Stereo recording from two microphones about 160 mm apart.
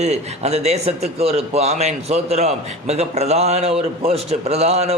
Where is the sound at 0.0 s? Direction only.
45° right (ahead or behind).